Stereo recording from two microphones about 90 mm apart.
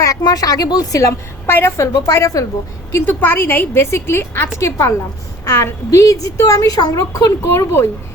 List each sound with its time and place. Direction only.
0.0 s speech: 45° left (ahead or behind)
1.5 s a woman's voice: 25° left (ahead or behind)
2.9 s a woman's voice: 20° left (ahead or behind); by 7.6 s 35° left (ahead or behind)